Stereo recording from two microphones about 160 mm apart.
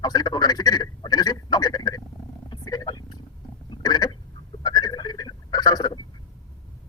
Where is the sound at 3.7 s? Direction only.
25° left (ahead or behind).